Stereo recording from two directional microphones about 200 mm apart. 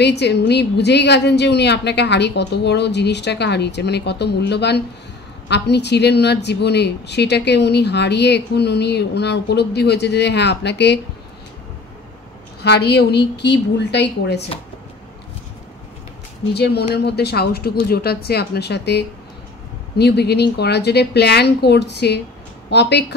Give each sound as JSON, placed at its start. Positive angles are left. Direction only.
{"t": 0.0, "sound": "speech", "side_deg": 60}
{"t": 12.6, "sound": "speech", "side_deg": 55}
{"t": 16.5, "sound": "speech", "side_deg": 55}